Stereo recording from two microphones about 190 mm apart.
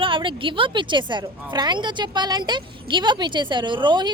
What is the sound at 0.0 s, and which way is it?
A woman's voice, 25° right (ahead or behind).